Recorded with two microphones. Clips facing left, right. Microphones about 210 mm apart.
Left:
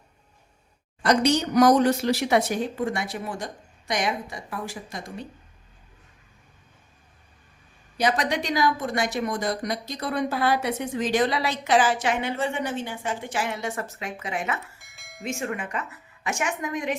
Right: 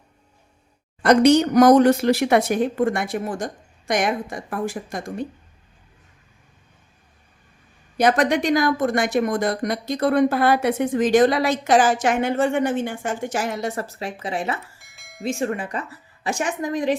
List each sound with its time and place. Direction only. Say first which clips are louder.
1.0 s speech: right 7 dB; 55° right (ahead or behind)
7.9 s speech: right 6 dB; 50° right (ahead or behind); by 14.6 s 35° right (ahead or behind)
14.8 s bell: even; centre (ahead or behind)
15.2 s a woman's voice: right 6 dB; 35° right (ahead or behind)